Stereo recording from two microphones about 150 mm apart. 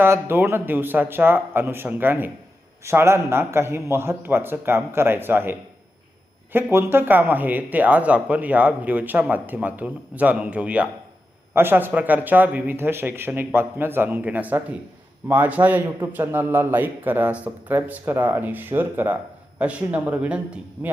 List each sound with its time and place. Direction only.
0.0 s speech: 15° right (ahead or behind)